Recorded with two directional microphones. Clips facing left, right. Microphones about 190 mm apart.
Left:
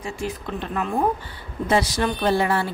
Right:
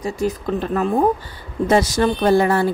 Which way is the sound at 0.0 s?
40° right (ahead or behind).